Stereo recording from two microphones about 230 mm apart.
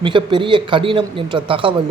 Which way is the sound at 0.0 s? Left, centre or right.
Right.